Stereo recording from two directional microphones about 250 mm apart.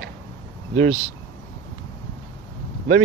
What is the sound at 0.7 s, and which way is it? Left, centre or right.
Speech, right.